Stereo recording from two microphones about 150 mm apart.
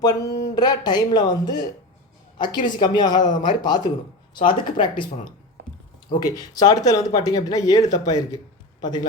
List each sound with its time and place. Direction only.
0.0 s speech: 25° left (ahead or behind)
2.6 s speech: 30° left (ahead or behind)
6.2 s a man's voice: 25° left (ahead or behind)